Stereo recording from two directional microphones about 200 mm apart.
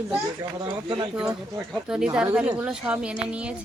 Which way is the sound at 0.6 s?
20° right (ahead or behind).